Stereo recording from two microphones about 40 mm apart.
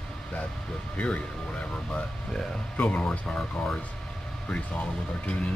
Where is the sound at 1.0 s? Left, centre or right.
Left.